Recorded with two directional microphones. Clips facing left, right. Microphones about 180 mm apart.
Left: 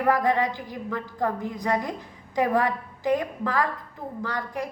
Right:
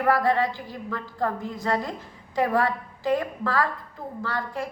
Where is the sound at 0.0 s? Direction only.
15° left (ahead or behind).